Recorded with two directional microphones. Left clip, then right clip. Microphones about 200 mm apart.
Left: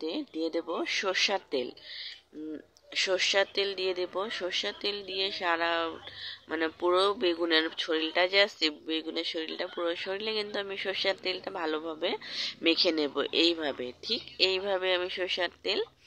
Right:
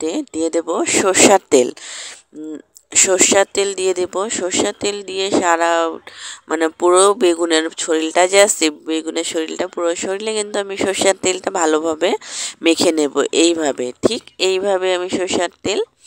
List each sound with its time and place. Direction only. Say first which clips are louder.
0.0 s speech: right 13 dB; 60° right (ahead or behind)
3.1 s speech: right 13 dB; 60° right (ahead or behind)